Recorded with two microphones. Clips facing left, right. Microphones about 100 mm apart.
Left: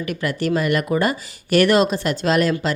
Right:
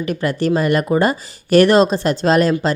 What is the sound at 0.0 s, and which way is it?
Speech, 30° right (ahead or behind).